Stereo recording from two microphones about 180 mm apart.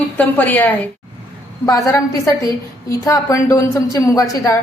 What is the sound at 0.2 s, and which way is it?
A woman's voice, 10° left (ahead or behind).